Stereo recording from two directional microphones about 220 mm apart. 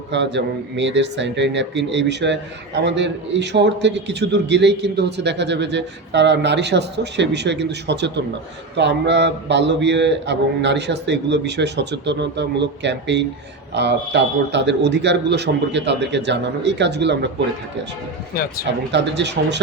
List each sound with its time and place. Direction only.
0.1 s a man's voice: 55° right (ahead or behind)
18.9 s a man's voice: 50° right (ahead or behind)